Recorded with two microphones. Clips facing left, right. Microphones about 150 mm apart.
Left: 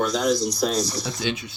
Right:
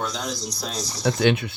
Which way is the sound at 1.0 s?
60° right (ahead or behind).